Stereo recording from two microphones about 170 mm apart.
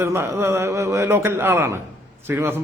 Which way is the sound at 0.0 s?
15° right (ahead or behind).